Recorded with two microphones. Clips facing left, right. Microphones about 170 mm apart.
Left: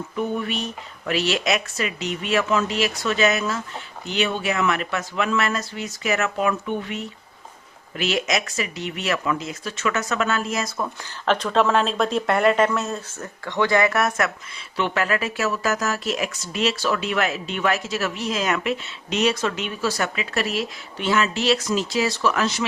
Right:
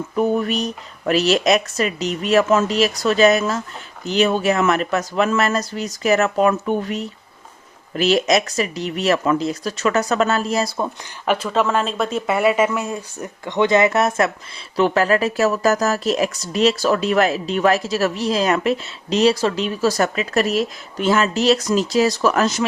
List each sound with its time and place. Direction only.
0.2 s speech: 40° right (ahead or behind)
11.3 s speech: 5° right (ahead or behind); by 14.3 s 25° right (ahead or behind)
14.8 s speech: 35° right (ahead or behind)